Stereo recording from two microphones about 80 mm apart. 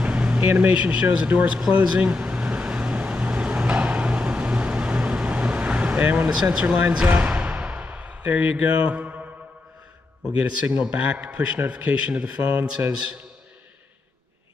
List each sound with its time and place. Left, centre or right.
0.0 s vehicle: centre
10.8 s a man's voice: centre